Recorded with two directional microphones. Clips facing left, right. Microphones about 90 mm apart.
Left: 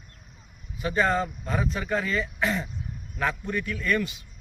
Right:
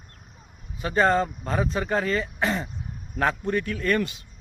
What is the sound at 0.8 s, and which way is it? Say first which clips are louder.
Speech: right 3 dB; 45° right (ahead or behind).